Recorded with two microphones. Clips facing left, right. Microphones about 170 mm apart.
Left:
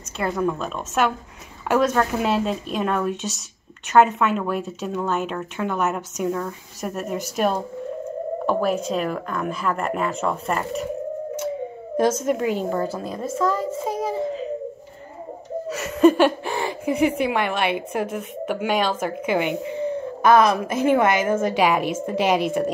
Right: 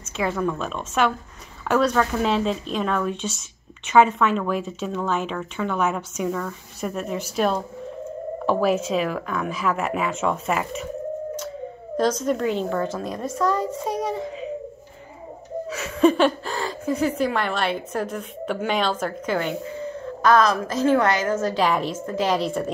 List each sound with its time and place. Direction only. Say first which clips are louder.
0.3 s speech: left 4 dB; 5° left (ahead or behind)
12.3 s speech: left 1 dB; 10° left (ahead or behind)
15.7 s a woman's voice: left 3 dB; 5° left (ahead or behind); by 21.5 s 25° left (ahead or behind)
21.5 s speech: left 2 dB; 10° left (ahead or behind)